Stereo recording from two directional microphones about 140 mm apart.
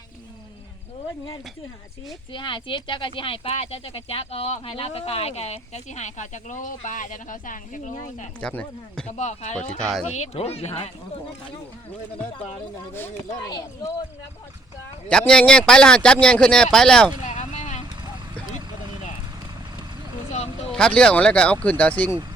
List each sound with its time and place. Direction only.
2.3 s speech: 35° left (ahead or behind); by 8.3 s 65° left (ahead or behind)
8.4 s speech: 5° left (ahead or behind)
9.0 s speech: 55° left (ahead or behind)
9.8 s speech: 5° left (ahead or behind)
10.1 s speech: 50° left (ahead or behind)
13.1 s speech: 30° left (ahead or behind)
15.3 s speech: 5° left (ahead or behind)
17.2 s vehicle: 55° left (ahead or behind)
20.7 s speech: 5° left (ahead or behind)